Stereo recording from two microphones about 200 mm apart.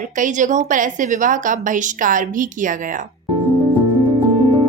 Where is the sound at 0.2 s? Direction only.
40° right (ahead or behind).